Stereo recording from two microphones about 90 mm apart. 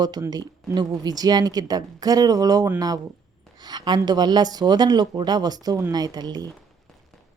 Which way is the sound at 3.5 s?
50° right (ahead or behind).